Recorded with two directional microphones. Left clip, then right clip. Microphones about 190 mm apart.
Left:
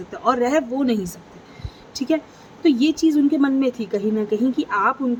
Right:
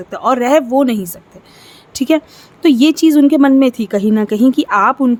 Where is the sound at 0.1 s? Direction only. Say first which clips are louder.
Right 7 dB; 40° right (ahead or behind).